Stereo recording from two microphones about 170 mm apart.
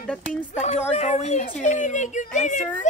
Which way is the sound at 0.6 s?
40° left (ahead or behind).